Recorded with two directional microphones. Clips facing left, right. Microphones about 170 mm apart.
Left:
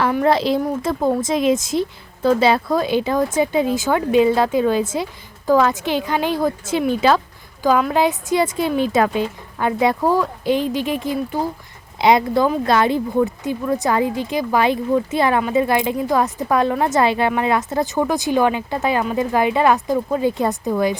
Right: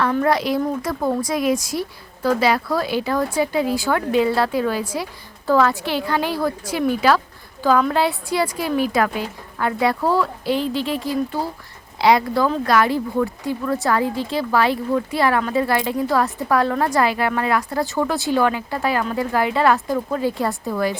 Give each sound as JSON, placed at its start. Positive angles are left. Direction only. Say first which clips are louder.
{"t": 0.3, "sound": "speech", "louder": "left 2 dB", "side_deg": 25}